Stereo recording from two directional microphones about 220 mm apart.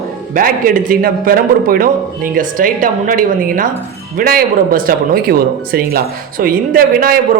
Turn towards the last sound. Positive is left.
turn(degrees=-40)  # may be behind; listen again after turning